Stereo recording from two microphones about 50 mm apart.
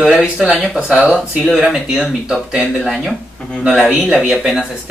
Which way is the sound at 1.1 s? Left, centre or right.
Centre.